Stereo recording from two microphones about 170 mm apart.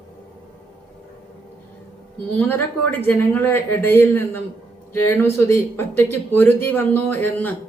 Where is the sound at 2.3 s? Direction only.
10° left (ahead or behind).